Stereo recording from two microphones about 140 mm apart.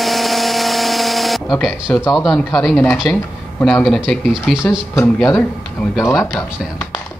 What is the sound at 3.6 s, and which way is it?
Speech, centre (ahead or behind).